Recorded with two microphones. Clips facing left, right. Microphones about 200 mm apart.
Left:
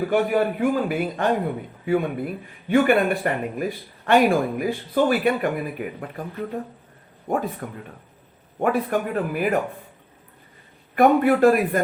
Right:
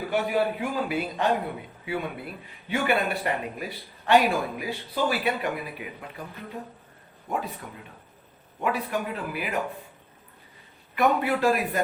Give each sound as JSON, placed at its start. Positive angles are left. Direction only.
{"t": 0.1, "sound": "a man's voice", "side_deg": 50}
{"t": 7.3, "sound": "a man's voice", "side_deg": 50}
{"t": 10.9, "sound": "a man's voice", "side_deg": 50}